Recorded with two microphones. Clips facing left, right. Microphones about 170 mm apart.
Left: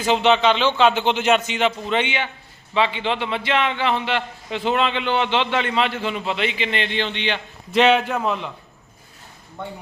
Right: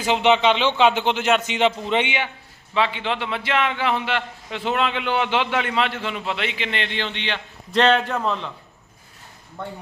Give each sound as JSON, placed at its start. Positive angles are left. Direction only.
{"t": 0.0, "sound": "speech", "side_deg": -15}
{"t": 2.7, "sound": "a man's voice", "side_deg": 0}